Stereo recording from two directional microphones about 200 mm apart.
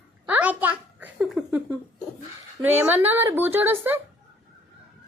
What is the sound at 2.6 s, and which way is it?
A child's voice, 10° right (ahead or behind).